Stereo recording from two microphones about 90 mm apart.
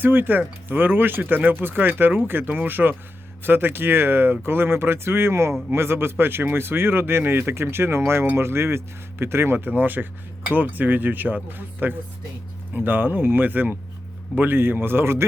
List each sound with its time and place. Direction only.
0.0 s speech: 25° right (ahead or behind)